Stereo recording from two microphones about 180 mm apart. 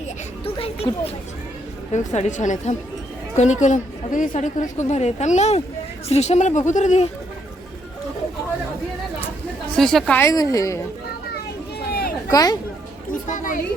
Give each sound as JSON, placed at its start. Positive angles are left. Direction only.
{"t": 0.4, "sound": "a sound", "side_deg": 30}
{"t": 1.9, "sound": "a woman's voice", "side_deg": 40}
{"t": 9.7, "sound": "a woman's voice", "side_deg": 5}
{"t": 11.9, "sound": "a sound", "side_deg": 60}
{"t": 12.3, "sound": "speech", "side_deg": 20}
{"t": 13.3, "sound": "a child's voice", "side_deg": 45}